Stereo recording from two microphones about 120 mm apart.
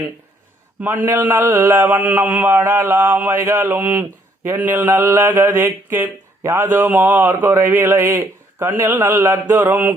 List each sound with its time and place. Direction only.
0.8 s mantra: 15° right (ahead or behind)